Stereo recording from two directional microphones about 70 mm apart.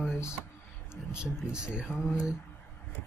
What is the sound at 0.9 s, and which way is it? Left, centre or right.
Speech, centre.